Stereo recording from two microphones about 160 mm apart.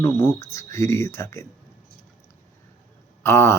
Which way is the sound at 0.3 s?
20° left (ahead or behind).